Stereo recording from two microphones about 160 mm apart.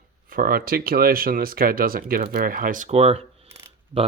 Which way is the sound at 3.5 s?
20° right (ahead or behind).